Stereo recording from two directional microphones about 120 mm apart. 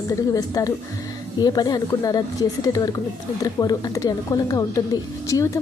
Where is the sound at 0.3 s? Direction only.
30° left (ahead or behind).